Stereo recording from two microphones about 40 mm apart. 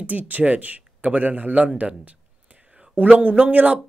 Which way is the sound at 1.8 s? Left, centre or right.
Right.